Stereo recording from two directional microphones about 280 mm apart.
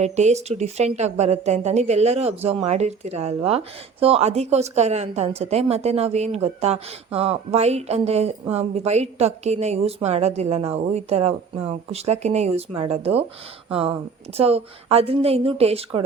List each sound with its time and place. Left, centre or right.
0.0 s speech: right